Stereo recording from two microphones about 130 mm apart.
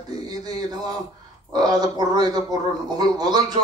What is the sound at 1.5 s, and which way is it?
A man's voice, 30° right (ahead or behind).